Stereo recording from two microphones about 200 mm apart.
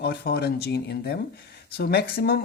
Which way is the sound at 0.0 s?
50° left (ahead or behind).